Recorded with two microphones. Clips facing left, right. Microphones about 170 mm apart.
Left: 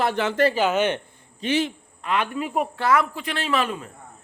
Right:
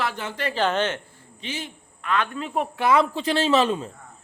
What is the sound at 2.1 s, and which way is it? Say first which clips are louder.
Speech: left 1 dB; 15° left (ahead or behind).